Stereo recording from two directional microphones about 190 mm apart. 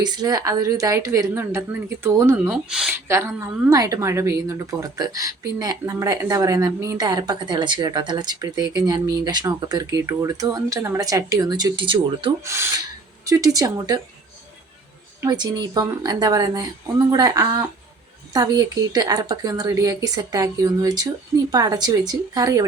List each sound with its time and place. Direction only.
0.0 s a woman's voice: 20° right (ahead or behind)
2.6 s speech: 5° right (ahead or behind)
3.1 s a woman's voice: 15° right (ahead or behind)
12.5 s a woman's voice: 15° right (ahead or behind)
15.2 s a woman's voice: 20° right (ahead or behind)